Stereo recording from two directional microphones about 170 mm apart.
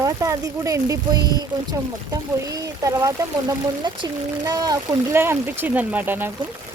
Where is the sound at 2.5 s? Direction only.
20° right (ahead or behind).